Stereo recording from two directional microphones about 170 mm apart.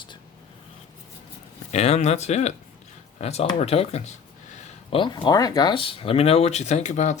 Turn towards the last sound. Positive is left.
turn(degrees=45)  # may be behind; listen again after turning